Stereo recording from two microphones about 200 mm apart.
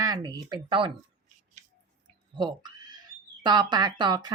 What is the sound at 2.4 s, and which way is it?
Speech, 20° right (ahead or behind).